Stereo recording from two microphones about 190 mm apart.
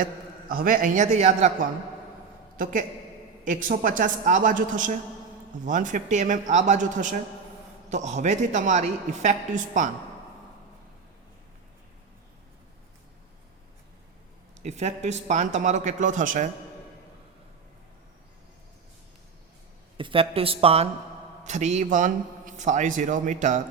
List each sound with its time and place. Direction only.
0.0 s a man's voice: 50° right (ahead or behind)
2.6 s a woman's voice: 45° right (ahead or behind)
14.6 s a man's voice: 35° right (ahead or behind)
20.0 s a man's voice: 30° right (ahead or behind)